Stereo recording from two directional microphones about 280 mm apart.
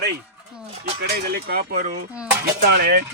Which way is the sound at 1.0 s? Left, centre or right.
Right.